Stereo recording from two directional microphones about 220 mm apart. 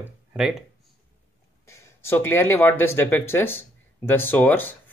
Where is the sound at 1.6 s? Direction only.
10° left (ahead or behind).